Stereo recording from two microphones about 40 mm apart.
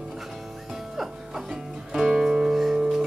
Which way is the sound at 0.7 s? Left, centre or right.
Centre.